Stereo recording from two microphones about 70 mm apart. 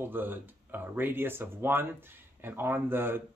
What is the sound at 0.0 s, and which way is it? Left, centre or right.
Speech, right.